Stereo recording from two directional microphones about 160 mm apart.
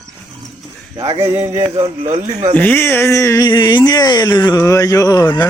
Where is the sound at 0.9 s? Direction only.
25° right (ahead or behind).